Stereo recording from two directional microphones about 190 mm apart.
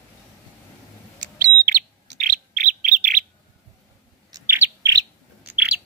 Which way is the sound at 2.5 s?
45° right (ahead or behind).